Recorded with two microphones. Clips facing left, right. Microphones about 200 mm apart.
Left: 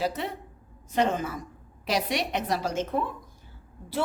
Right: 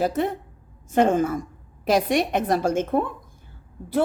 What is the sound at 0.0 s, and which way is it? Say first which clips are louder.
A woman's voice: right 7 dB; 50° right (ahead or behind).